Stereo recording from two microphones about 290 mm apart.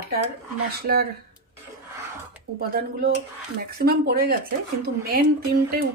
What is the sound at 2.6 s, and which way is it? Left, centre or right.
Speech, right.